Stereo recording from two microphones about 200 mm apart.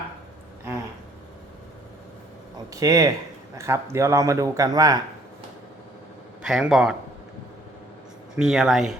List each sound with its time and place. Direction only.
2.7 s speech: 15° right (ahead or behind)
6.4 s speech: 5° right (ahead or behind)
8.4 s speech: centre (ahead or behind)